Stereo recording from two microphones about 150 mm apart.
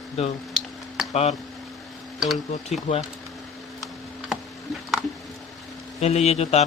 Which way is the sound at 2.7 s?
45° left (ahead or behind).